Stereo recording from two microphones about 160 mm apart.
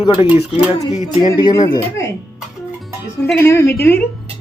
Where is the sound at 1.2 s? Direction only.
25° left (ahead or behind).